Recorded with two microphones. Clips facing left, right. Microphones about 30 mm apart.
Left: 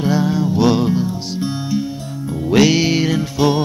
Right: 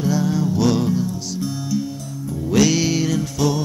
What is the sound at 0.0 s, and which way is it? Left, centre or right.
Music, left.